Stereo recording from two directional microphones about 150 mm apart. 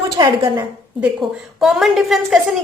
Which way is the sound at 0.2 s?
25° right (ahead or behind).